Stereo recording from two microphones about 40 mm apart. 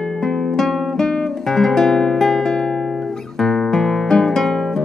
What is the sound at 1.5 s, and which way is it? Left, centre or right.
Guitar, centre.